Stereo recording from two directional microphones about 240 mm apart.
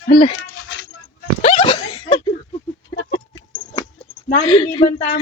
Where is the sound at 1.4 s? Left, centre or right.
Left.